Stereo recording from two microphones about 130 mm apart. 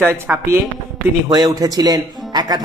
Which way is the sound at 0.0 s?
20° right (ahead or behind).